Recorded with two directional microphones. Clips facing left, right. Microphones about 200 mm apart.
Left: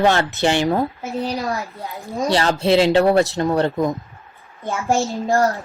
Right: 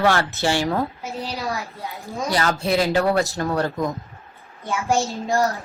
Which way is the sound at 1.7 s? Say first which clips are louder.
Left 3 dB; centre (ahead or behind).